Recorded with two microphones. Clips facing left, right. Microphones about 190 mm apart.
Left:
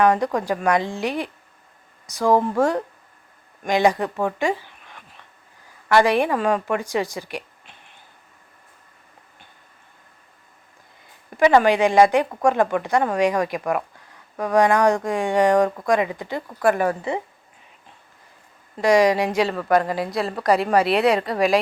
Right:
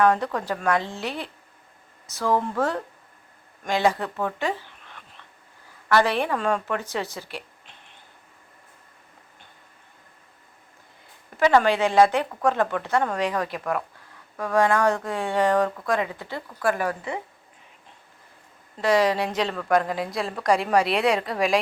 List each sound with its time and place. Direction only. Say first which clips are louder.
0.0 s speech: left 3 dB; 15° left (ahead or behind)
5.9 s speech: left 4 dB; 15° left (ahead or behind)
11.3 s a woman's voice: left 3 dB; 15° left (ahead or behind)
18.8 s a woman's voice: left 4 dB; 15° left (ahead or behind)